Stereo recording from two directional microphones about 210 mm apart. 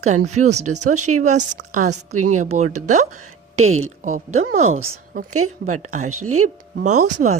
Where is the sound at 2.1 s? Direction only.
90° right.